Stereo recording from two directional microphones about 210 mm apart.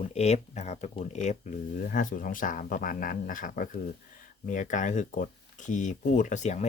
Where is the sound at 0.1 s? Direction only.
30° left (ahead or behind).